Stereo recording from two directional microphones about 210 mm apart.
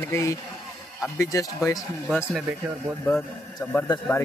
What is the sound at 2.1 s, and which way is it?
Speech, centre (ahead or behind).